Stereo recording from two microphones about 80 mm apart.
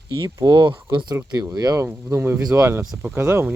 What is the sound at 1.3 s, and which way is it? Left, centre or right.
Speech, right.